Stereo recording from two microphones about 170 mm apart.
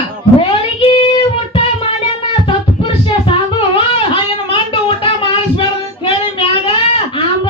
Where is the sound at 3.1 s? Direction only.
30° left (ahead or behind).